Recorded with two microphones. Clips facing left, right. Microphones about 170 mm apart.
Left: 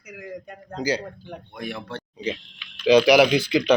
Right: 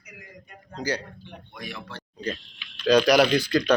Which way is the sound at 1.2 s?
55° left (ahead or behind).